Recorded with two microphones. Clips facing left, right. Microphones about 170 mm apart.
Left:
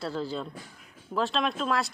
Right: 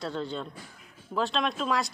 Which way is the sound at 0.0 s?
5° left (ahead or behind).